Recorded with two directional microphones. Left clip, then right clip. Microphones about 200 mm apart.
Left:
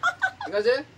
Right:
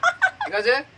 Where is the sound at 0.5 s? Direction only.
25° left (ahead or behind).